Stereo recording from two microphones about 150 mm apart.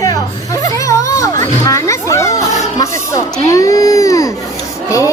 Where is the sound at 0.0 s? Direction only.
25° left (ahead or behind).